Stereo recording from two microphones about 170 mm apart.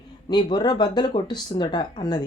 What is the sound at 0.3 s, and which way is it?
Speech, 25° left (ahead or behind).